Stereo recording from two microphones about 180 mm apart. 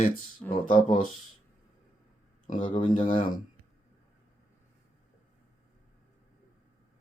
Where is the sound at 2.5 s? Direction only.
45° left (ahead or behind).